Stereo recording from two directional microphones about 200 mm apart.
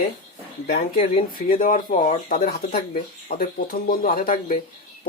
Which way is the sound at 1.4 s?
45° left (ahead or behind).